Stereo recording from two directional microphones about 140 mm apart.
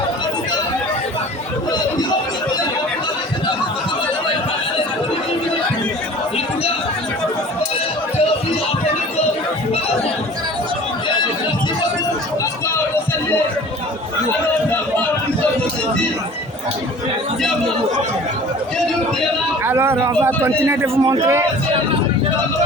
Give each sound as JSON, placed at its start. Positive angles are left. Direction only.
{"t": 19.6, "sound": "a sound", "side_deg": -15}
{"t": 20.7, "sound": "a man's voice", "side_deg": -15}
{"t": 21.0, "sound": "a man's voice", "side_deg": -30}